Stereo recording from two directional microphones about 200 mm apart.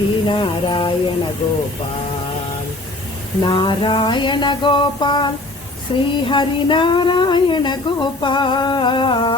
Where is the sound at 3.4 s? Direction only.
25° left (ahead or behind).